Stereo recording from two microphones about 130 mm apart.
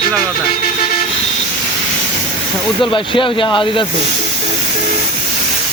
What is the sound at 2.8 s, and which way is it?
Speech, 40° left (ahead or behind).